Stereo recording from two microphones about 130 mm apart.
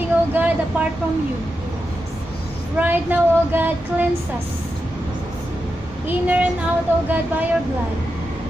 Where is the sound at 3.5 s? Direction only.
15° right (ahead or behind).